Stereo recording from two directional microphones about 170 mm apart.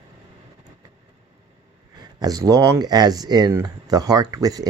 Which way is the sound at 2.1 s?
20° right (ahead or behind).